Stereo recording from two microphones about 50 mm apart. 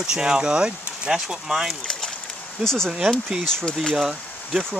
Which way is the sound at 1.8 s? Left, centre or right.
Centre.